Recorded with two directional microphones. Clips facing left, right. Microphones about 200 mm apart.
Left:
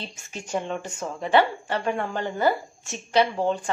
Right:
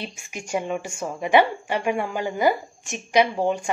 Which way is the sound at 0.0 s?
10° right (ahead or behind).